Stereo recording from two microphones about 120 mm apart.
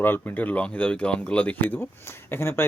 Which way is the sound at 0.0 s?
15° left (ahead or behind).